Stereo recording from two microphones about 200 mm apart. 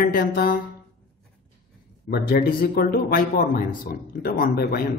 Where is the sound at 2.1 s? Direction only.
45° left (ahead or behind).